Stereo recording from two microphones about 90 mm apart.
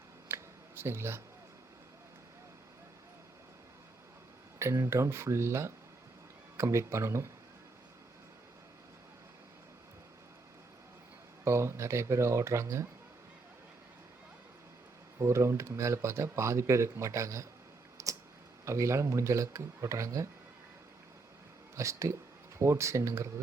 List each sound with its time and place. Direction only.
0.3 s a sound: 25° right (ahead or behind)
4.6 s speech: 30° right (ahead or behind)
11.4 s speech: 30° right (ahead or behind)
15.2 s speech: 30° right (ahead or behind)
17.9 s tick: 35° right (ahead or behind)
18.6 s speech: 35° right (ahead or behind)
21.8 s speech: 35° right (ahead or behind)